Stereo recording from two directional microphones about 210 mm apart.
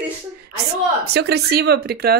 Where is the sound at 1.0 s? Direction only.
50° right (ahead or behind).